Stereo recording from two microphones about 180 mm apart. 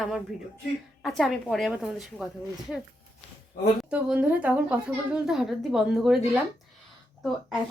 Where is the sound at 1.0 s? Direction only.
Centre (ahead or behind).